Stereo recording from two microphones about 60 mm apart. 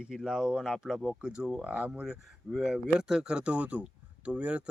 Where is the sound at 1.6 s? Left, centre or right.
Right.